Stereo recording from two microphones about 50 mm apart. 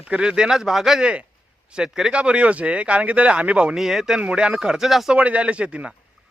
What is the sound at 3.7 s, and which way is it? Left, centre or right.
Speech, centre.